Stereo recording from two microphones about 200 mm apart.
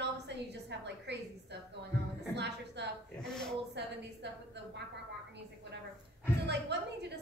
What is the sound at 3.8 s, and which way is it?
Speech, 60° right (ahead or behind).